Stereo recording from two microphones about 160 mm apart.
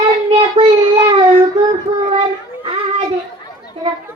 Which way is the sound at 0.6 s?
45° right (ahead or behind).